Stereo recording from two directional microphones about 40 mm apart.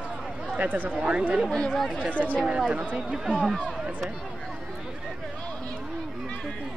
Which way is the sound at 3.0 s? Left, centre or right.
Centre.